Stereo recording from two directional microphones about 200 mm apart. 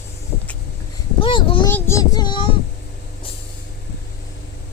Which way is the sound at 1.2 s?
25° left (ahead or behind).